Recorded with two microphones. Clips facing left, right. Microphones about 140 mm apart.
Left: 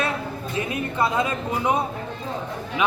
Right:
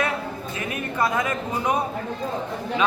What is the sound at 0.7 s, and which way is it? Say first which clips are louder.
A man's voice: right 1 dB; 25° left (ahead or behind).